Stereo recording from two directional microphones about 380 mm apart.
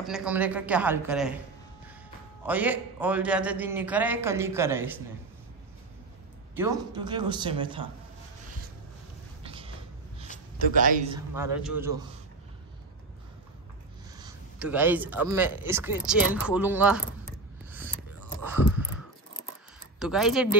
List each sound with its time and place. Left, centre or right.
0.0 s speech: centre
2.4 s speech: centre
6.5 s speech: centre
9.4 s a sound: centre
10.6 s a man's voice: right
11.3 s speech: centre
14.1 s speech: centre
17.6 s a sound: centre
20.0 s speech: centre